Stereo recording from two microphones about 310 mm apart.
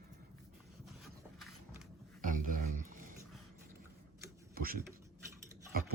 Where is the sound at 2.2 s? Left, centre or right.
Right.